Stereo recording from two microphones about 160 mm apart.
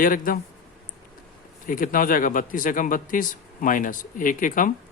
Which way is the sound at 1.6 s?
60° left (ahead or behind).